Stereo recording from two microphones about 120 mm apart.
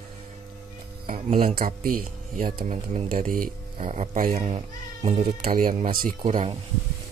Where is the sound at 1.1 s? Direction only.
75° right (ahead or behind).